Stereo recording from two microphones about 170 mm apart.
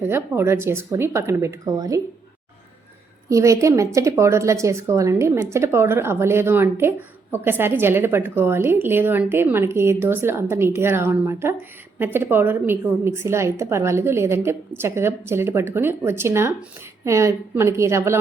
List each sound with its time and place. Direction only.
0.0 s a woman's voice: 15° right (ahead or behind)
3.2 s a woman's voice: 20° right (ahead or behind)